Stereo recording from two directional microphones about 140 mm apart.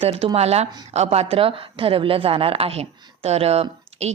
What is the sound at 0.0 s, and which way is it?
A woman's voice, 40° right (ahead or behind).